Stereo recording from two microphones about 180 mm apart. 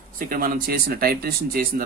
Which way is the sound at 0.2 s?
50° right (ahead or behind).